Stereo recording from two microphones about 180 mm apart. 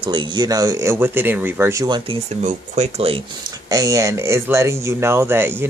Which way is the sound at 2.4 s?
40° right (ahead or behind).